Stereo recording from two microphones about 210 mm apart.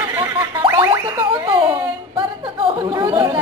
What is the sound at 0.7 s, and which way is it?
Boing, 15° right (ahead or behind).